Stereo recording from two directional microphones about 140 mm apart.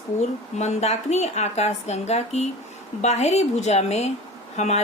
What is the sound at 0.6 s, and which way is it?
Speech, 55° left (ahead or behind).